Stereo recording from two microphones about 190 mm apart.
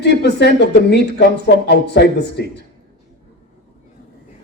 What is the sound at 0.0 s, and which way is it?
A man's voice, 65° left (ahead or behind).